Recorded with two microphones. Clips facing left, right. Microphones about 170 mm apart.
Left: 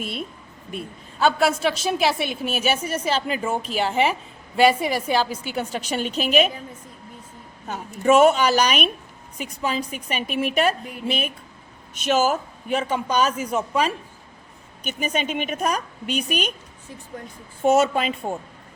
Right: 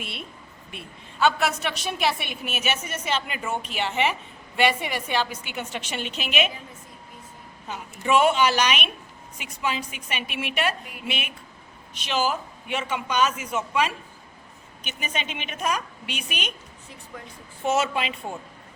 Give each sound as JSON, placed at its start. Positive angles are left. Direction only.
{"t": 0.0, "sound": "a sound", "side_deg": 45}
{"t": 0.7, "sound": "a woman's voice", "side_deg": 40}
{"t": 7.7, "sound": "a woman's voice", "side_deg": 45}
{"t": 17.6, "sound": "a woman's voice", "side_deg": 45}